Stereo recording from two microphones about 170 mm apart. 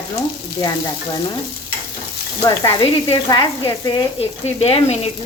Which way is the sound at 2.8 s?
35° left (ahead or behind).